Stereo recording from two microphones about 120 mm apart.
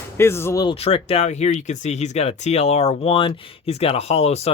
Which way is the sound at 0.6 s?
55° left (ahead or behind).